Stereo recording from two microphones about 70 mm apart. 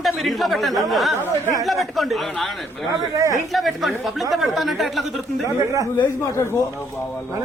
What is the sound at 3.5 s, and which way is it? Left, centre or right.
Speech, centre.